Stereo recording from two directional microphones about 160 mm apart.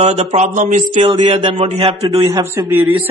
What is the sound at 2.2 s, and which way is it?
Speech, 20° right (ahead or behind).